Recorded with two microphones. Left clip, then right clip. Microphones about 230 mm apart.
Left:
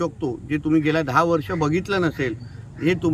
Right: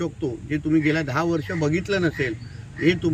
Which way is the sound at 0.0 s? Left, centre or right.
Left.